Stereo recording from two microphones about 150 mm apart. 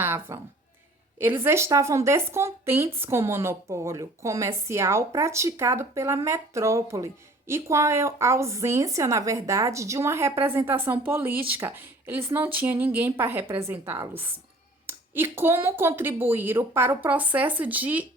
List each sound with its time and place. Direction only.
0.0 s a woman's voice: 15° right (ahead or behind)